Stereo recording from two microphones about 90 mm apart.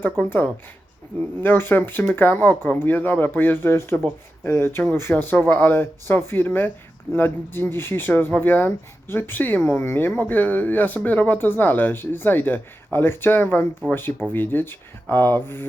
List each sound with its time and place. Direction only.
0.0 s speech: 20° left (ahead or behind)